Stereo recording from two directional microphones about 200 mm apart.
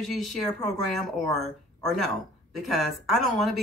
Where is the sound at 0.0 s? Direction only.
Centre (ahead or behind).